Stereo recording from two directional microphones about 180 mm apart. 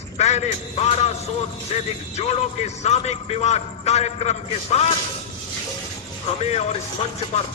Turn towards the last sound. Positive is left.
turn(degrees=40)  # may be behind; listen again after turning